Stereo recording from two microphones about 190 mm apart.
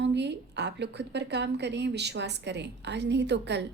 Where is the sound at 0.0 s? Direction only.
65° right (ahead or behind).